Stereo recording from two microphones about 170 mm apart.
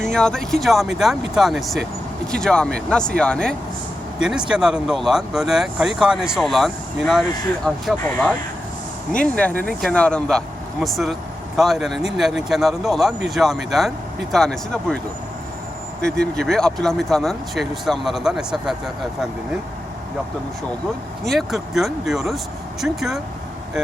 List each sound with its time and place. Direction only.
0.0 s speech: 5° left (ahead or behind)
16.1 s speech: 5° left (ahead or behind)
21.2 s speech: centre (ahead or behind)